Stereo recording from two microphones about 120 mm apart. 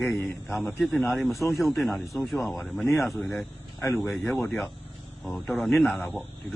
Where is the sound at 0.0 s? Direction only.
20° left (ahead or behind).